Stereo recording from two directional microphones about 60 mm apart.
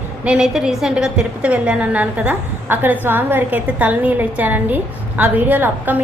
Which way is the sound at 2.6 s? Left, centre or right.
Right.